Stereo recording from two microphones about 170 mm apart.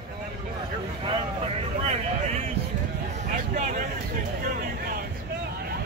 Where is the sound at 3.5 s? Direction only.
50° right (ahead or behind).